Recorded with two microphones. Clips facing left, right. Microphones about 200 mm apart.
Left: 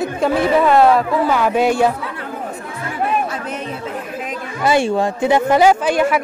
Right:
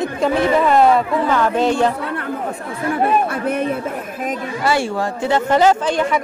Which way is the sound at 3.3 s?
55° right (ahead or behind).